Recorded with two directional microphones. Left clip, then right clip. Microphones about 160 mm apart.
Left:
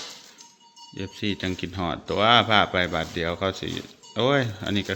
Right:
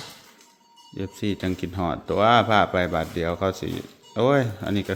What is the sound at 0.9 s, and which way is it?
Speech, 15° right (ahead or behind).